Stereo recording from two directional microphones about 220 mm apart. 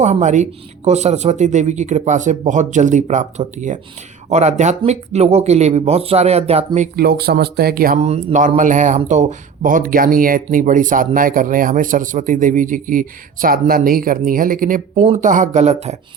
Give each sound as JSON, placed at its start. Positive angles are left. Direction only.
{"t": 0.0, "sound": "speech", "side_deg": -35}
{"t": 6.9, "sound": "speech", "side_deg": -45}
{"t": 14.9, "sound": "speech", "side_deg": -30}